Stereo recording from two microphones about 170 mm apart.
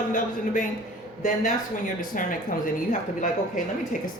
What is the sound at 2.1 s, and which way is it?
Speech, 50° left (ahead or behind).